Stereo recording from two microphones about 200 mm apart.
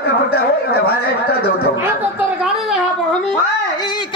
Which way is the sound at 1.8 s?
5° right (ahead or behind).